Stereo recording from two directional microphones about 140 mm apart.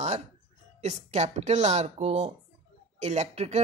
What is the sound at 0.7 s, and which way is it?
Speech, 55° right (ahead or behind).